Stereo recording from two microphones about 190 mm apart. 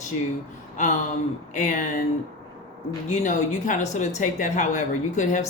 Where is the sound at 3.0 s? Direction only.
40° left (ahead or behind).